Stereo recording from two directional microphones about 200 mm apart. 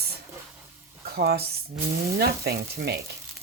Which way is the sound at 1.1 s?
55° right (ahead or behind).